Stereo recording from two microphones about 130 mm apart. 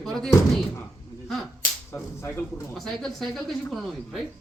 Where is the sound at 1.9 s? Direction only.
20° left (ahead or behind).